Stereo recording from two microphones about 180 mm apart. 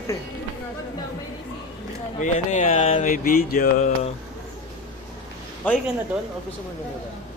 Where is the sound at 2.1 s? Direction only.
45° left (ahead or behind).